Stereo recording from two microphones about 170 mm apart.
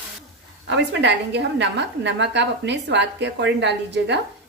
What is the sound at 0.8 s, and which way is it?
A woman's voice, 90° right.